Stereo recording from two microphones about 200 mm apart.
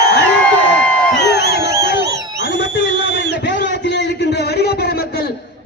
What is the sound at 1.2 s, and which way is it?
Crowd, 60° left (ahead or behind).